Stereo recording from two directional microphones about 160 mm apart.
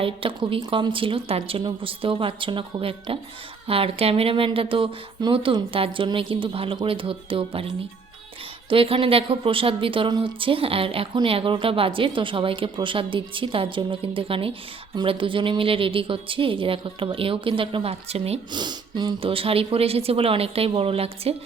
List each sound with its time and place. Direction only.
0.0 s speech: 35° right (ahead or behind)
8.7 s speech: 35° right (ahead or behind)
18.6 s speech: 25° right (ahead or behind)